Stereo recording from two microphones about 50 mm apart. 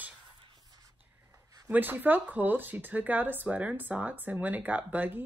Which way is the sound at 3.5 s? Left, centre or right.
Right.